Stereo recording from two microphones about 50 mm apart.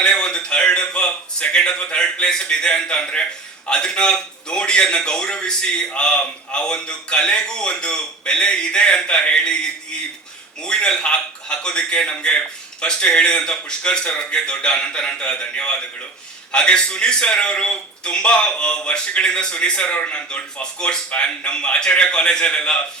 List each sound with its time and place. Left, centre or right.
0.0 s a man's voice: centre
10.6 s a man's voice: centre